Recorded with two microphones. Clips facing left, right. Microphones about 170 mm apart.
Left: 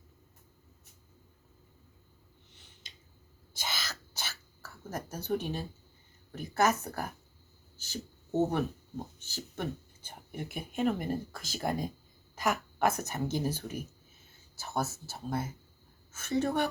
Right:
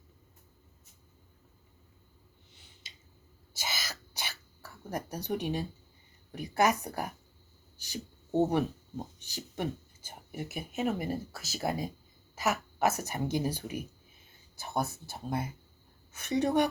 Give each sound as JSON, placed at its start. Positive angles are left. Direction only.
{"t": 3.5, "sound": "cough", "side_deg": -10}
{"t": 6.3, "sound": "a woman's voice", "side_deg": -15}
{"t": 7.8, "sound": "a sound", "side_deg": -15}
{"t": 9.1, "sound": "a woman's voice", "side_deg": -15}